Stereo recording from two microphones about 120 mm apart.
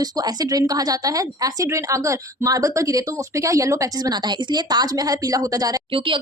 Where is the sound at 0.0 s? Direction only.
35° right (ahead or behind).